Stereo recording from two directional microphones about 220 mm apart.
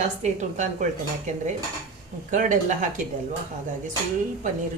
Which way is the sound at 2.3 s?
35° right (ahead or behind).